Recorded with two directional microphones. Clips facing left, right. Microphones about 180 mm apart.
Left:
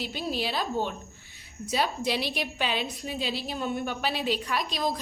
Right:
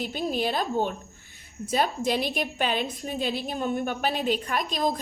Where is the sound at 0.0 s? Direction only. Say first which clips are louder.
Right 4 dB; 50° right (ahead or behind).